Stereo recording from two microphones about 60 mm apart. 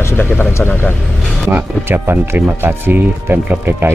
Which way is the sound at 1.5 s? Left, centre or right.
Right.